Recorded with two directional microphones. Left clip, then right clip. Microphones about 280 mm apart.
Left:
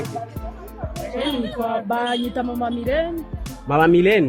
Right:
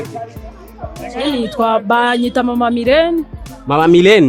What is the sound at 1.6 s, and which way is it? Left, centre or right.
Speech, right.